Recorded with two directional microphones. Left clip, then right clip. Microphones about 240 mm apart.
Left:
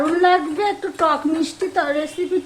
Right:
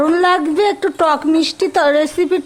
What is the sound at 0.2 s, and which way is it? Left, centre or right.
A woman's voice, right.